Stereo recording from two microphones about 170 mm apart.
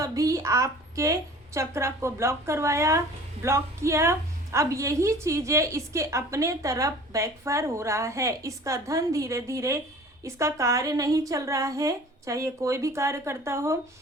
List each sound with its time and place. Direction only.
0.0 s a woman's voice: 20° right (ahead or behind)